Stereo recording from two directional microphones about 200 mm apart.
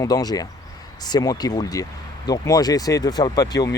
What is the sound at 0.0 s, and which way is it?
Speech, 20° left (ahead or behind).